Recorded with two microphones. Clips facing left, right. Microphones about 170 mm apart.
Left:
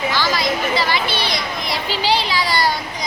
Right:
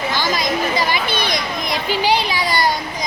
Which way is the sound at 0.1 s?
20° right (ahead or behind).